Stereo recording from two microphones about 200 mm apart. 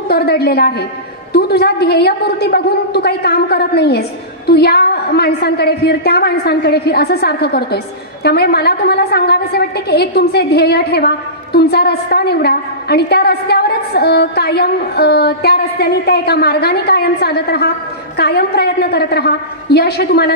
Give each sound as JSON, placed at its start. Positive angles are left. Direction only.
{"t": 0.1, "sound": "a woman's voice", "side_deg": 55}